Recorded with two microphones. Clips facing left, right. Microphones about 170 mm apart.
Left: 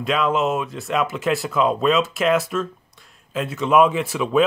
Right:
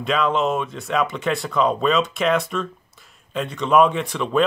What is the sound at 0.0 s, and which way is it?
Speech, centre (ahead or behind).